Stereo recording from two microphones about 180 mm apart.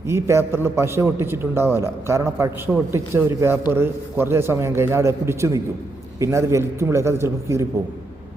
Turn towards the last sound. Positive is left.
turn(degrees=-15)  # may be behind; listen again after turning